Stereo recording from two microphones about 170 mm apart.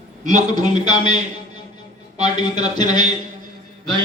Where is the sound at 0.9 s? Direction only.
45° right (ahead or behind).